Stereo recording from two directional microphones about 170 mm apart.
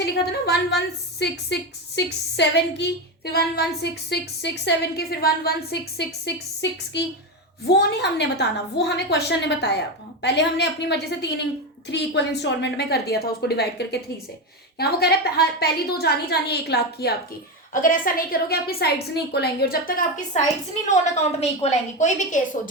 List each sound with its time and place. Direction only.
0.0 s a woman's voice: 75° left (ahead or behind)
1.5 s a woman's voice: 90° left; by 5.5 s 65° left (ahead or behind)
6.2 s a woman's voice: 85° left
17.7 s a woman's voice: 55° left (ahead or behind)
21.4 s a woman's voice: 40° left (ahead or behind)